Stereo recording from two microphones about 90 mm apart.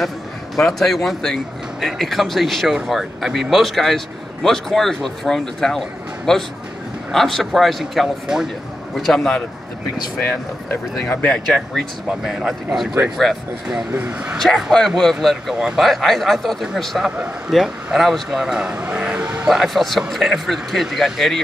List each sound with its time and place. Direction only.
0.6 s a man's voice: 5° left (ahead or behind)
10.7 s speech: 15° left (ahead or behind)
12.1 s a man's voice: 5° right (ahead or behind)
13.9 s speech: 20° right (ahead or behind)
14.3 s a man's voice: centre (ahead or behind)
19.5 s a man's voice: centre (ahead or behind)